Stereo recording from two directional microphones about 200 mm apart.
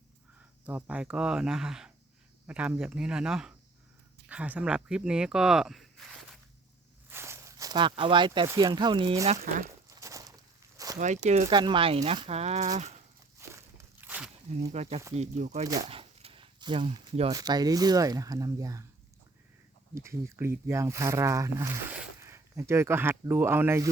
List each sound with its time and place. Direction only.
0.6 s speech: 10° right (ahead or behind)
7.1 s a sound: 15° right (ahead or behind)
8.4 s speech: 20° right (ahead or behind)
9.9 s a sound: 15° right (ahead or behind)
11.3 s speech: 35° right (ahead or behind)
13.5 s walk: 10° right (ahead or behind)
14.7 s speech: 30° right (ahead or behind)
15.9 s dog: 30° right (ahead or behind)
17.3 s speech: 20° right (ahead or behind)
19.9 s speech: 15° right (ahead or behind)